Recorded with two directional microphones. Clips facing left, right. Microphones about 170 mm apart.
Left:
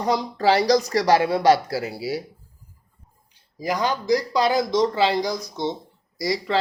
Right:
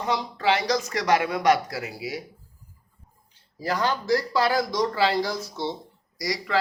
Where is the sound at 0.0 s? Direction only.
40° left (ahead or behind).